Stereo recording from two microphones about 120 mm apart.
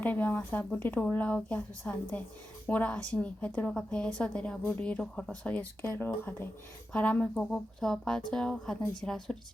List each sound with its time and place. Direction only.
0.0 s a woman's voice: 15° left (ahead or behind)